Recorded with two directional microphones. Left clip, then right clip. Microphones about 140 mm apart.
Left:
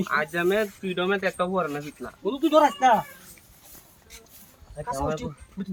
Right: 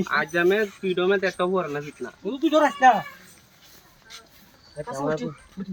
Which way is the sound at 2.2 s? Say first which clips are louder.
Left 1 dB; 35° left (ahead or behind).